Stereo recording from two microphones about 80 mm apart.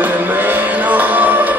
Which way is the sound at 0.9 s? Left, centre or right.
Right.